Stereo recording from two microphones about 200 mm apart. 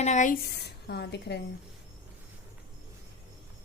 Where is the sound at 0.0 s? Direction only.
35° left (ahead or behind).